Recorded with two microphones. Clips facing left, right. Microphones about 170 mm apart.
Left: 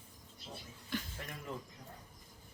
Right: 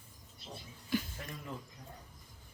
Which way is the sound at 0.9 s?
5° right (ahead or behind).